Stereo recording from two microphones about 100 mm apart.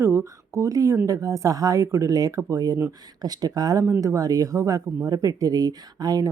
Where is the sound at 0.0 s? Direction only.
30° right (ahead or behind).